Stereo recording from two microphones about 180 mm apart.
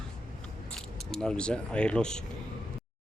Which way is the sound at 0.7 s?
5° left (ahead or behind).